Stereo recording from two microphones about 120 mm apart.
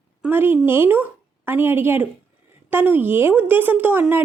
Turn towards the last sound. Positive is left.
turn(degrees=-15)  # may be behind; listen again after turning